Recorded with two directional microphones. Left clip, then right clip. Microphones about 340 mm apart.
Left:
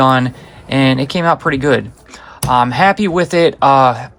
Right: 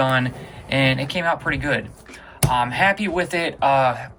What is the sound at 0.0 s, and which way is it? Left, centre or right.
Speech, centre.